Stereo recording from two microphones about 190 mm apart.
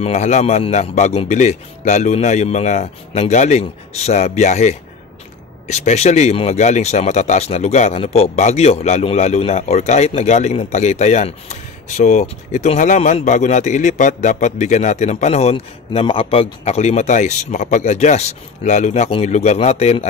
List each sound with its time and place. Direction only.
0.0 s speech: 35° left (ahead or behind)